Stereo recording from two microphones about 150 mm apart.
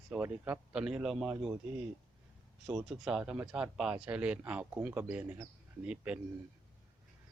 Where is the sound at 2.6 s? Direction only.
5° right (ahead or behind).